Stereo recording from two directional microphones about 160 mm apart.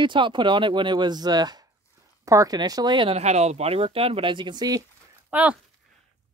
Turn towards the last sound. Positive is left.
turn(degrees=-10)  # may be behind; listen again after turning